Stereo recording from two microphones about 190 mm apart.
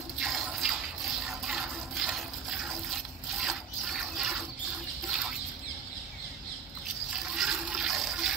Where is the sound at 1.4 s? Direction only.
5° right (ahead or behind).